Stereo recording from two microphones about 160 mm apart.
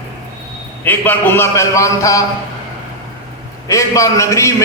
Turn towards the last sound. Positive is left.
turn(degrees=20)  # may be behind; listen again after turning